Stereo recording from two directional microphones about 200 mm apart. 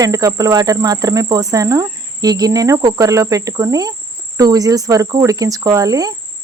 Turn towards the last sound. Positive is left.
turn(degrees=-20)  # may be behind; listen again after turning